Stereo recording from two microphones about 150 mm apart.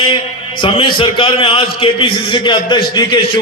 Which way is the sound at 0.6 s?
35° left (ahead or behind).